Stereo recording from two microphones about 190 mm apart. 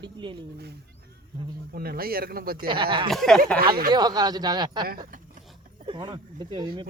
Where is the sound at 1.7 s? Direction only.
50° right (ahead or behind).